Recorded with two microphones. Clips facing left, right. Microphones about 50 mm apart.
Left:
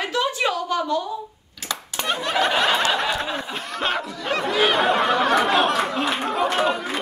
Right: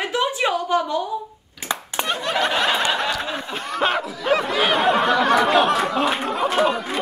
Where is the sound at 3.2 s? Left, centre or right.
Centre.